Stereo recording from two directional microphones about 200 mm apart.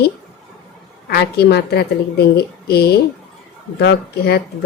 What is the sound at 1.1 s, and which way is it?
Speech, 55° left (ahead or behind).